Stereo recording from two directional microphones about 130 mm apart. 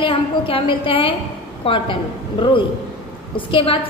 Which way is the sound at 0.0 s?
45° left (ahead or behind).